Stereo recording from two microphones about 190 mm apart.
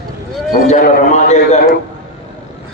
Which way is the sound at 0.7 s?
35° left (ahead or behind).